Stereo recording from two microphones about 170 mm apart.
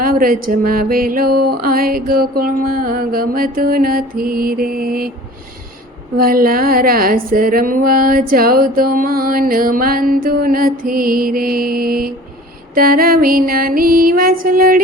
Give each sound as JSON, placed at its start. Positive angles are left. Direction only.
{"t": 0.0, "sound": "speech", "side_deg": -60}
{"t": 6.1, "sound": "speech", "side_deg": -60}